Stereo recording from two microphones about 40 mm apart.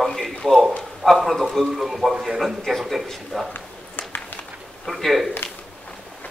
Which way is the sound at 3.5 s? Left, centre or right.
Left.